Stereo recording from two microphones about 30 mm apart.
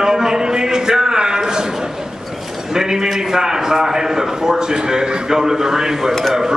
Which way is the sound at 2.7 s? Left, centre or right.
Right.